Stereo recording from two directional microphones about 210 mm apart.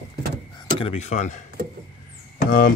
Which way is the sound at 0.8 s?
30° left (ahead or behind).